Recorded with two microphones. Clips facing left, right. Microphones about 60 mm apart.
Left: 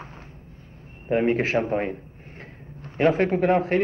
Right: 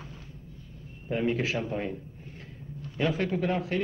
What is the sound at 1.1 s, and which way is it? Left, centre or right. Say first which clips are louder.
Speech: left 7 dB; left.